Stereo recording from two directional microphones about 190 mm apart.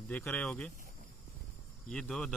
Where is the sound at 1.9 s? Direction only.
5° left (ahead or behind).